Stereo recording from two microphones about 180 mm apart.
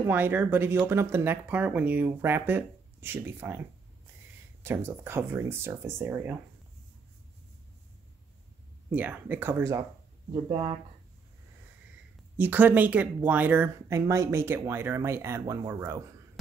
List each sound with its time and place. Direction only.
0.0 s speech: 10° right (ahead or behind)
4.6 s speech: 15° right (ahead or behind)
8.9 s speech: 10° right (ahead or behind); by 10.8 s 25° right (ahead or behind)
12.4 s speech: 10° right (ahead or behind)